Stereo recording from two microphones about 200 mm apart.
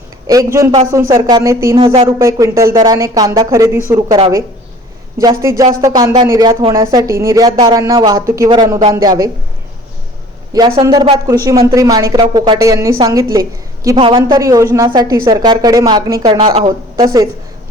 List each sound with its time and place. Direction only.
0.3 s speech: 15° right (ahead or behind)
5.2 s speech: 15° right (ahead or behind)
10.5 s speech: 20° right (ahead or behind)
14.3 s speech: 15° right (ahead or behind)